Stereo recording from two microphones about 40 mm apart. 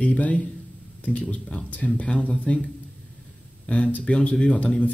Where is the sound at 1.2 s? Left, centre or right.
Left.